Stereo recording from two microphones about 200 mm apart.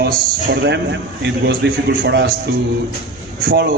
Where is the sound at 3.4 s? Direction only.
55° right (ahead or behind).